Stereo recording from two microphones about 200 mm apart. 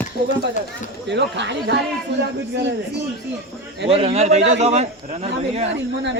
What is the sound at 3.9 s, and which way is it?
A man's voice, 30° right (ahead or behind).